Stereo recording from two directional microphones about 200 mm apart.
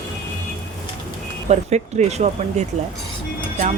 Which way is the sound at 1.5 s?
35° right (ahead or behind).